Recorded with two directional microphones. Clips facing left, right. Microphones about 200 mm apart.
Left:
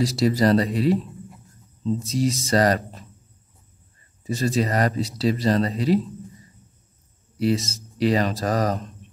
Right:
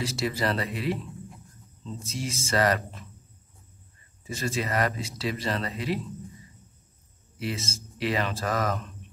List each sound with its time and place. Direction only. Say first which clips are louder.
0.0 s speech: left 9 dB; 35° left (ahead or behind)
4.2 s speech: left 8 dB; 35° left (ahead or behind)
7.3 s speech: left 11 dB; 35° left (ahead or behind)